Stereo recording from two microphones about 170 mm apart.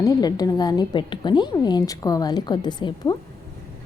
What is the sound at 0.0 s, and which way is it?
A woman's voice, 20° left (ahead or behind).